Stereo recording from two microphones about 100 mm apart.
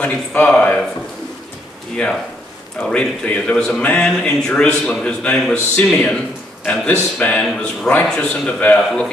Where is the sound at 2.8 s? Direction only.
10° left (ahead or behind).